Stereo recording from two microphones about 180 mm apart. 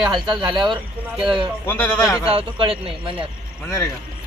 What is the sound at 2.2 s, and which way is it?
Speech, 30° right (ahead or behind).